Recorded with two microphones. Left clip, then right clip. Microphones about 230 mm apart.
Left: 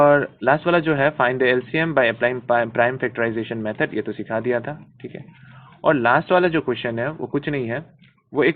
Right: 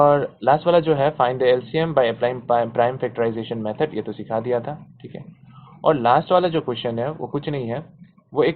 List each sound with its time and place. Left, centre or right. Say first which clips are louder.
0.0 s speech: left 1 dB; left